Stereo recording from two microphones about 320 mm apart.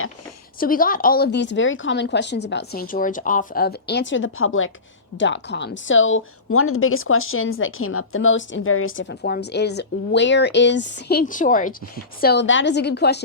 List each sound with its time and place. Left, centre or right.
0.6 s a woman's voice: left